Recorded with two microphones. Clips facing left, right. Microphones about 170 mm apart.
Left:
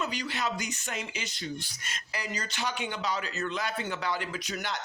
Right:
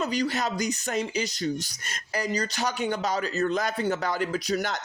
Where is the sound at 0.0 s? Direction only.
40° right (ahead or behind).